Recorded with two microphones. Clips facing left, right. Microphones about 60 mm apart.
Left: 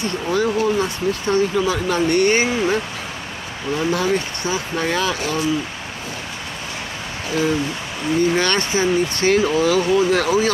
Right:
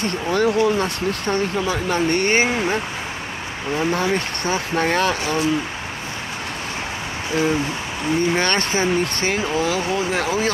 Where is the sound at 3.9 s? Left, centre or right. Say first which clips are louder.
Left 2 dB; right.